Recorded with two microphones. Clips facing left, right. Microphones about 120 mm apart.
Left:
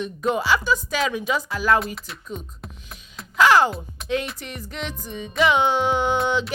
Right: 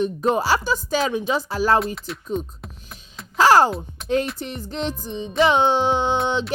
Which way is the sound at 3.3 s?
35° right (ahead or behind).